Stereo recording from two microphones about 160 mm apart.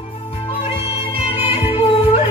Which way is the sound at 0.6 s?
35° left (ahead or behind).